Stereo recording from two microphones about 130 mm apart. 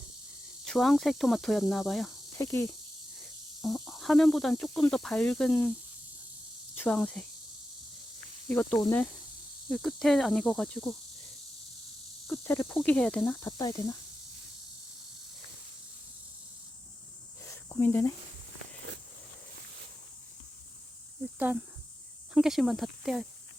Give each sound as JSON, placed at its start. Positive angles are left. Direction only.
{"t": 0.6, "sound": "speech", "side_deg": 0}
{"t": 2.4, "sound": "speech", "side_deg": 25}
{"t": 3.6, "sound": "speech", "side_deg": 0}
{"t": 6.7, "sound": "speech", "side_deg": 10}
{"t": 8.4, "sound": "speech", "side_deg": 10}
{"t": 12.4, "sound": "speech", "side_deg": 15}
{"t": 13.4, "sound": "speech", "side_deg": 25}
{"t": 17.4, "sound": "cricket", "side_deg": 20}
{"t": 21.3, "sound": "speech", "side_deg": -10}